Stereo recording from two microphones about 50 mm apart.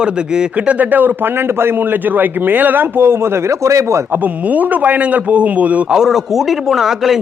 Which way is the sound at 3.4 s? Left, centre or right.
Right.